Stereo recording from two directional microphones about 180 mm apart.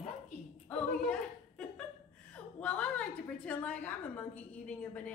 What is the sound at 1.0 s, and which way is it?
Chuckle, 5° left (ahead or behind).